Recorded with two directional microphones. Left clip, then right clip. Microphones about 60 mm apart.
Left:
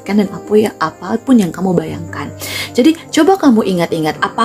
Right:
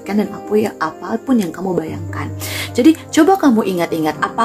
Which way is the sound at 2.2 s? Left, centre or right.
Centre.